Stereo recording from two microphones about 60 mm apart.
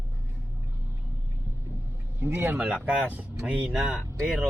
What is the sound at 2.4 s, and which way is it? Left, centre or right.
Speech, right.